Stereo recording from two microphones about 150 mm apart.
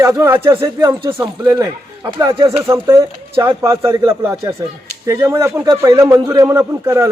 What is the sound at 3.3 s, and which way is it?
Speech, 35° right (ahead or behind).